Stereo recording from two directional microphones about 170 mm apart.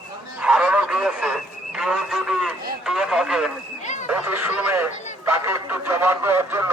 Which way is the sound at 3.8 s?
45° left (ahead or behind).